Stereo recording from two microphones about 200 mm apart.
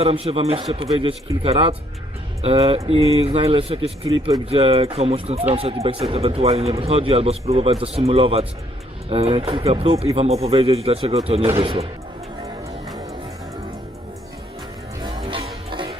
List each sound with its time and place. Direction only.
0.0 s speech: 30° right (ahead or behind)
15.0 s music: 25° right (ahead or behind)